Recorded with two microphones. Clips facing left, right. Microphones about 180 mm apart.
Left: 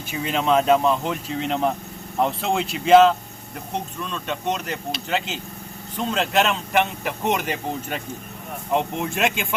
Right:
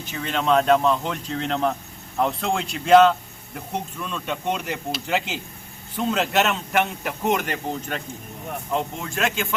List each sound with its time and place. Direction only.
0.0 s a man's voice: 10° left (ahead or behind)
8.7 s speech: 15° left (ahead or behind)